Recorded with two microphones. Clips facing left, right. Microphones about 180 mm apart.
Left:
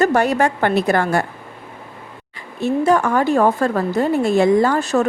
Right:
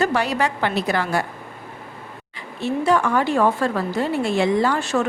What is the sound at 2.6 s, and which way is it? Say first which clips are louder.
Speech: left 3 dB; 45° left (ahead or behind).